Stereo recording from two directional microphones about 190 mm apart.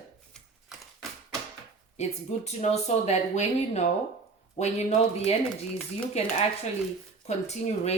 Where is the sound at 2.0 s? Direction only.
35° left (ahead or behind).